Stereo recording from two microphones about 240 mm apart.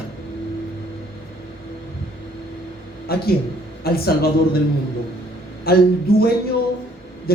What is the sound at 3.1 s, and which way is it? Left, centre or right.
Speech, left.